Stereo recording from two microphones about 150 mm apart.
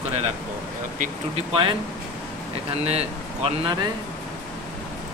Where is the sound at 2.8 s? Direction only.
45° right (ahead or behind).